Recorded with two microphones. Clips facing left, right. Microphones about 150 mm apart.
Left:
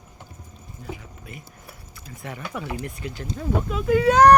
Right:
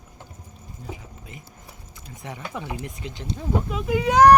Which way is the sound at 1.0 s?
20° right (ahead or behind).